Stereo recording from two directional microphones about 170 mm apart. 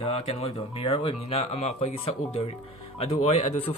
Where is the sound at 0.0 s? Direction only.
35° left (ahead or behind).